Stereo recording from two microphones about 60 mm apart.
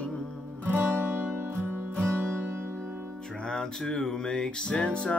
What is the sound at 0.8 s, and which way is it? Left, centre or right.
Music, right.